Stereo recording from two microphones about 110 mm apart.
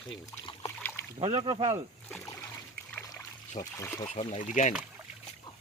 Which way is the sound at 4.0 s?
90° left.